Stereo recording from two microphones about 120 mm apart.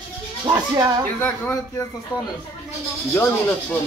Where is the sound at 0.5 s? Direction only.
35° right (ahead or behind).